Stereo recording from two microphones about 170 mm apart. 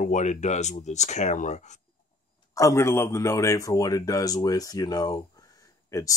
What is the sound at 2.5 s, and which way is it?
Speech, 15° left (ahead or behind).